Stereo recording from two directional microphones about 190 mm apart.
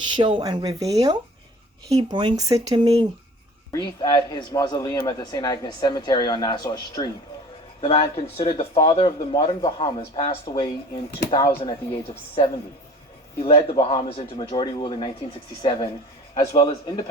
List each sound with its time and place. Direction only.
0.1 s speech: 25° right (ahead or behind)
2.8 s speech: 30° right (ahead or behind)
3.7 s a man's voice: 20° left (ahead or behind)